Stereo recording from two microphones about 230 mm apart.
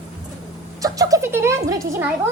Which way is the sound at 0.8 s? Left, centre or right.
Centre.